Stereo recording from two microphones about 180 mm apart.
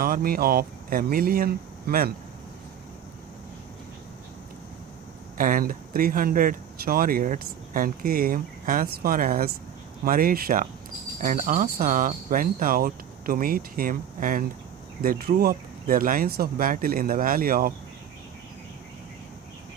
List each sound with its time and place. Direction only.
0.0 s speech: 55° right (ahead or behind)
5.4 s speech: 50° right (ahead or behind)